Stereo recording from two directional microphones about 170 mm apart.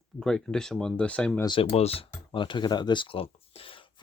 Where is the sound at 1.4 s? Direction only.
35° left (ahead or behind).